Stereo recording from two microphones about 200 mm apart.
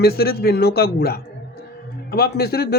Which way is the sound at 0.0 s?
50° left (ahead or behind).